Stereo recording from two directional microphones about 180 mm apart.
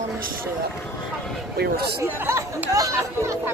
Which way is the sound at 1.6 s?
65° right (ahead or behind).